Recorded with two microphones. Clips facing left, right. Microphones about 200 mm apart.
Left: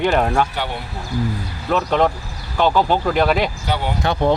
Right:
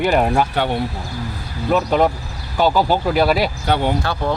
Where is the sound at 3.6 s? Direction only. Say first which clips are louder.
Right 4 dB; 55° right (ahead or behind).